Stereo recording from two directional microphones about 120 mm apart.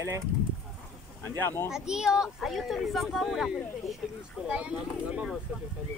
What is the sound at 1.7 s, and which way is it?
Speech, 5° right (ahead or behind).